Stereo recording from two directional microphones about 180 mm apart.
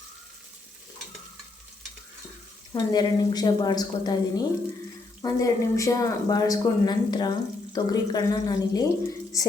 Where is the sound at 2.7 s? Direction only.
20° left (ahead or behind).